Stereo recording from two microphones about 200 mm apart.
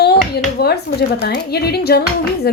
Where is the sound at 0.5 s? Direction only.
50° left (ahead or behind).